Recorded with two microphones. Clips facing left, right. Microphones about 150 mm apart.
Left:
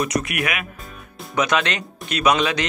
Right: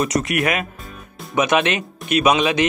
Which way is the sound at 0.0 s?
30° right (ahead or behind).